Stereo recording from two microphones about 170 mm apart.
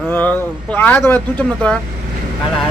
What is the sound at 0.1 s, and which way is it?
Speech, 10° left (ahead or behind).